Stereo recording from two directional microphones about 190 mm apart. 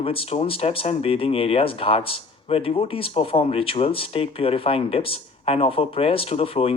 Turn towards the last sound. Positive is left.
turn(degrees=30)  # may be behind; listen again after turning